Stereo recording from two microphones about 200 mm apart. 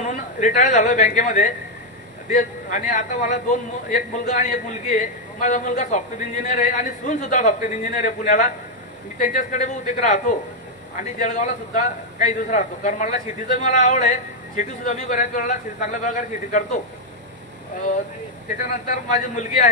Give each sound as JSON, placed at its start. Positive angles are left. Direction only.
{"t": 0.0, "sound": "a woman's voice", "side_deg": 40}
{"t": 18.7, "sound": "a man's voice", "side_deg": 40}